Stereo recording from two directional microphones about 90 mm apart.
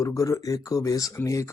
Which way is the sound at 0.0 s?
35° left (ahead or behind).